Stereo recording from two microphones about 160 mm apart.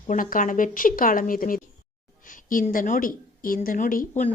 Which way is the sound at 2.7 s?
60° left (ahead or behind).